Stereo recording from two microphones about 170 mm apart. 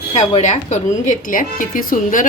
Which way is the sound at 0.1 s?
40° left (ahead or behind).